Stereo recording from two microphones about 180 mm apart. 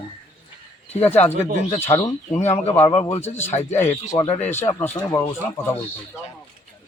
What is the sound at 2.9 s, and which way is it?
Speech, 30° left (ahead or behind).